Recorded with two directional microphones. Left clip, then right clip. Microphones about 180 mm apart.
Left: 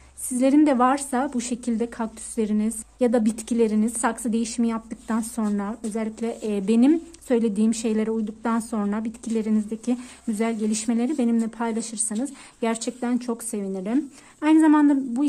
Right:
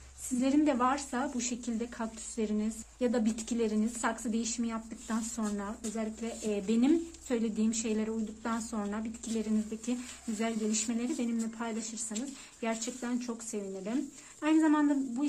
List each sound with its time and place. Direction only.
0.4 s a woman's voice: 40° left (ahead or behind)